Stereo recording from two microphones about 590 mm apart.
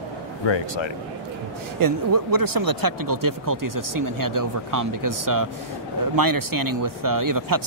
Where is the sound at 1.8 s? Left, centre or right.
Right.